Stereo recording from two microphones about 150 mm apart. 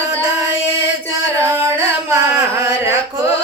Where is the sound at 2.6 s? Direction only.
20° right (ahead or behind).